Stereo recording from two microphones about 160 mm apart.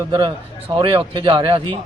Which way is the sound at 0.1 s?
30° right (ahead or behind).